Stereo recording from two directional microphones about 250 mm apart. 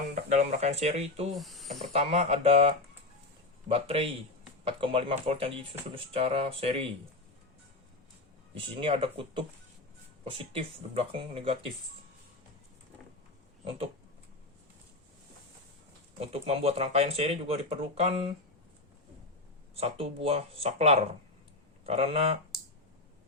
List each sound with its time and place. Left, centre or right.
0.1 s speech: right
1.4 s speech: centre
1.9 s speech: right
8.7 s speech: right
16.1 s speech: right
19.7 s speech: right